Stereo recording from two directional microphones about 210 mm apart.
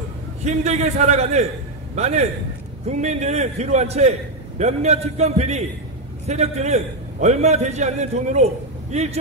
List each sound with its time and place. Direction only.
0.4 s a man's voice: 30° right (ahead or behind)